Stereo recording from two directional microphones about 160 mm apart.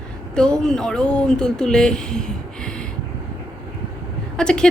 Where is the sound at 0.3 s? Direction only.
5° left (ahead or behind).